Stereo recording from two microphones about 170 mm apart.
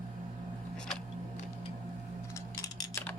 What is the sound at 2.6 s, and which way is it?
Typing, 15° left (ahead or behind).